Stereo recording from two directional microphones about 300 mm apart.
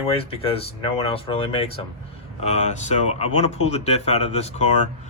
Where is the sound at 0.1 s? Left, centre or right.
Centre.